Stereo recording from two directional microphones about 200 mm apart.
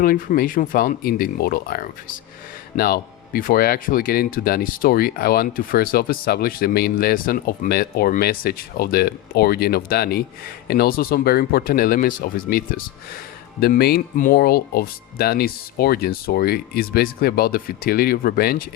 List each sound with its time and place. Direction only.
0.0 s speech: 45° left (ahead or behind)